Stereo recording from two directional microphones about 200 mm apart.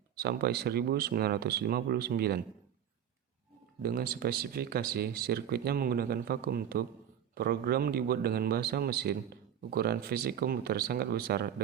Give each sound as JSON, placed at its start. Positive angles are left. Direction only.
{"t": 0.2, "sound": "speech", "side_deg": -55}
{"t": 3.8, "sound": "speech", "side_deg": -50}